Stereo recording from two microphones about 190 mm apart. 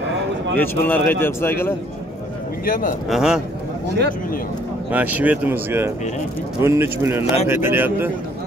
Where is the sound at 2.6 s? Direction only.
50° left (ahead or behind).